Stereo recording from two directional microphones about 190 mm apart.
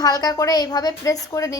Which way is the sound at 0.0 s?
20° left (ahead or behind).